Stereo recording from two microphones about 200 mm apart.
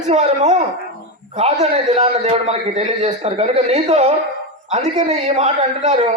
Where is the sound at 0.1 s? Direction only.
35° right (ahead or behind).